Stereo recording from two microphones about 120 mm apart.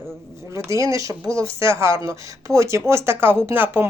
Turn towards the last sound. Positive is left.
turn(degrees=-15)  # may be behind; listen again after turning